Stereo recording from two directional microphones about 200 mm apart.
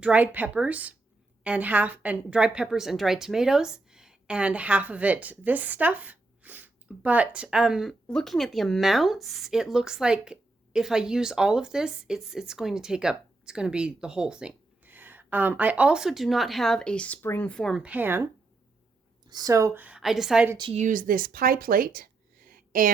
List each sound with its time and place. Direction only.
0.0 s a woman's voice: 5° right (ahead or behind)
19.3 s a woman's voice: 20° right (ahead or behind)
20.6 s a woman's voice: 25° right (ahead or behind)
20.8 s speech: 40° right (ahead or behind)